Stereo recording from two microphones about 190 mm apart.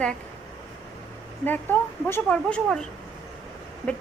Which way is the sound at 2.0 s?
10° left (ahead or behind).